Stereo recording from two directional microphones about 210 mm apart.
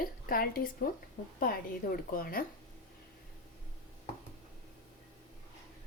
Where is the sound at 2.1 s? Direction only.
45° left (ahead or behind).